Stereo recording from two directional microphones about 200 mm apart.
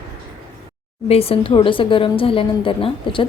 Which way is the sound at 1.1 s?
30° left (ahead or behind).